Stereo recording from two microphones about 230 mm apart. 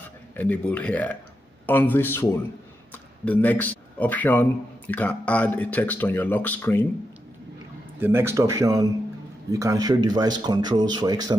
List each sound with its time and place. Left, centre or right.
0.4 s speech: centre
8.0 s speech: centre